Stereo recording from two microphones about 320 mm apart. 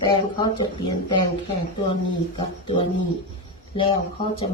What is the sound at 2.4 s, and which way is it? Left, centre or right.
Speech, centre.